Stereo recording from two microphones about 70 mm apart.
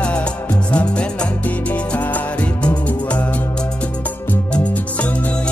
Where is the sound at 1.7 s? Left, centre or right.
Left.